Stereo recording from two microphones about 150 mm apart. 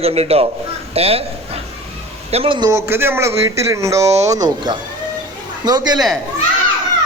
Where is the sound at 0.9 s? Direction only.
40° right (ahead or behind).